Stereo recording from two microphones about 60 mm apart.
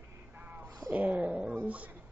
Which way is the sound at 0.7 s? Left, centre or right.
Right.